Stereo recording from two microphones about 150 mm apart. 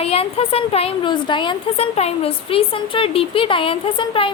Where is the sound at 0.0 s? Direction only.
40° left (ahead or behind).